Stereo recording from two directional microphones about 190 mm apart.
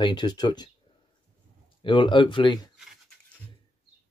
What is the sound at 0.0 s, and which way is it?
Speech, 20° left (ahead or behind).